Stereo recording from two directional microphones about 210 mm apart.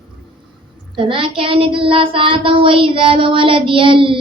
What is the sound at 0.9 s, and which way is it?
Child singing, 25° right (ahead or behind).